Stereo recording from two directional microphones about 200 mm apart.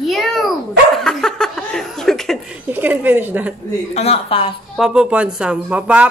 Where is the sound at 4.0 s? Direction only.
30° left (ahead or behind).